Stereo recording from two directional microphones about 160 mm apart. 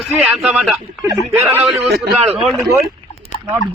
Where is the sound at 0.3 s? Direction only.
Centre (ahead or behind).